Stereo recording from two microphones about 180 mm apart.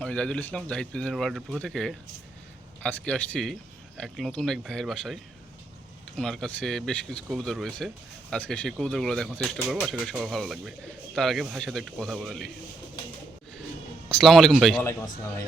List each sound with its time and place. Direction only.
0.0 s speech: 5° left (ahead or behind)
14.1 s speech: centre (ahead or behind)
14.8 s speech: 15° left (ahead or behind)